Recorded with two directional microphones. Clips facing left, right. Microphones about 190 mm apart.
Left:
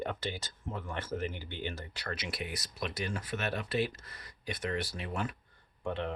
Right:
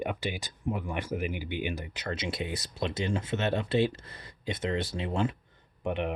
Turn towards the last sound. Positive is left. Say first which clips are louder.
# right 4 dB
turn(degrees=-15)  # may be behind; listen again after turning